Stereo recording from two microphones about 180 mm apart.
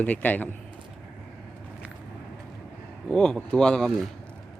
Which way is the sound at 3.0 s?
5° left (ahead or behind).